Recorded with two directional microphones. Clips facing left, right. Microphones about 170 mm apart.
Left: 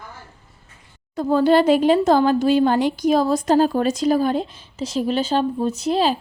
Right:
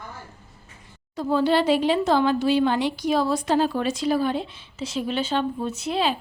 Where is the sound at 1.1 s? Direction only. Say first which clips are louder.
Left 5 dB; 50° left (ahead or behind).